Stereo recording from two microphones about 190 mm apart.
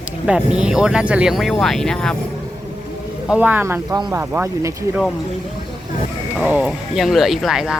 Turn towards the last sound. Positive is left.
turn(degrees=0)  # may be behind; listen again after turning